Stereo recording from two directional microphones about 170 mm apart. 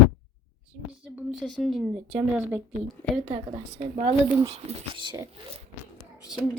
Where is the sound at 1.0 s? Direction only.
Centre (ahead or behind).